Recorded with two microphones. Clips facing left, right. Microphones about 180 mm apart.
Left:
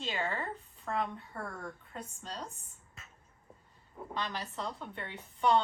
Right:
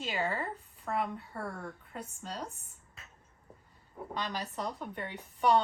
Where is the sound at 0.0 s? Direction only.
10° right (ahead or behind).